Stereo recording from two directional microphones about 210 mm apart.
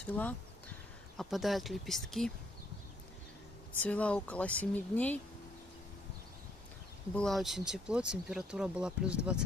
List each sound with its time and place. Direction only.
0.0 s speech: 10° left (ahead or behind)
3.8 s speech: 5° left (ahead or behind)
7.2 s speech: centre (ahead or behind)